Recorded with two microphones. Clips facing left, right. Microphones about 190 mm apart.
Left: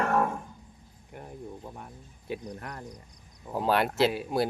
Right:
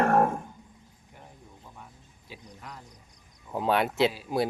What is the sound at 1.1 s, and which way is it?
Cricket, 60° left (ahead or behind).